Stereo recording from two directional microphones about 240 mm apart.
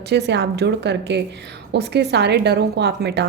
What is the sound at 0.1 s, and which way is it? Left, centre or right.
A woman's voice, right.